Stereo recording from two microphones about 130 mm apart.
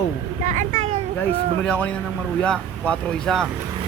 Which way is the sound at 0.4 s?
70° right (ahead or behind).